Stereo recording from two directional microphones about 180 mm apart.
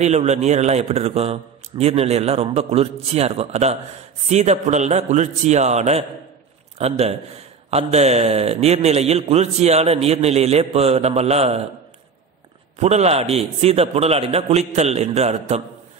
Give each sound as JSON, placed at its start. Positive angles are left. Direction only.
{"t": 0.0, "sound": "a man's voice", "side_deg": -40}
{"t": 12.7, "sound": "a man's voice", "side_deg": -35}